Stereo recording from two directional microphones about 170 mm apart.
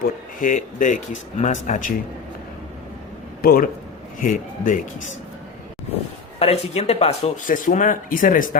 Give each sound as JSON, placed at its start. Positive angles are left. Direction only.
{"t": 0.0, "sound": "speech", "side_deg": 50}
{"t": 3.4, "sound": "speech", "side_deg": 55}
{"t": 6.4, "sound": "speech", "side_deg": 35}